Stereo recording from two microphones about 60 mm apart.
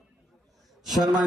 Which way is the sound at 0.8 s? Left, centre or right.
Centre.